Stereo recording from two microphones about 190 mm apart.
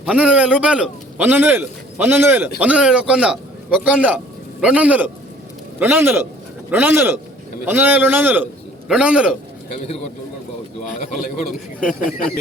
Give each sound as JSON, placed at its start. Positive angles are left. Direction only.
{"t": 0.0, "sound": "a man's voice", "side_deg": -5}
{"t": 11.8, "sound": "speech", "side_deg": 45}